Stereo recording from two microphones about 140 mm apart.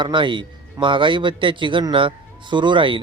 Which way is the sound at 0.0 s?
35° right (ahead or behind).